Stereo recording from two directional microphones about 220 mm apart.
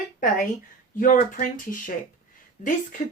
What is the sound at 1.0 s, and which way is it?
A woman's voice, 40° left (ahead or behind).